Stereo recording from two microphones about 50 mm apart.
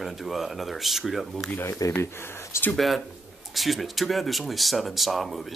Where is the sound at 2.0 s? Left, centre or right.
Left.